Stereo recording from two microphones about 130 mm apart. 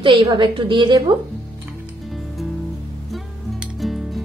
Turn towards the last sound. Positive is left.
turn(degrees=0)  # may be behind; listen again after turning